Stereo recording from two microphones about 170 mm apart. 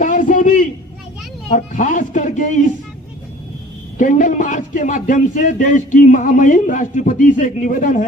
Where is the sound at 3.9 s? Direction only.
50° left (ahead or behind).